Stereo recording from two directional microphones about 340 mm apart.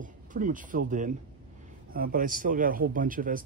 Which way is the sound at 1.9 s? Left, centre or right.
Right.